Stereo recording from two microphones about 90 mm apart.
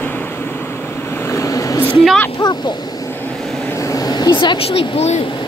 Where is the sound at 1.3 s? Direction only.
35° left (ahead or behind).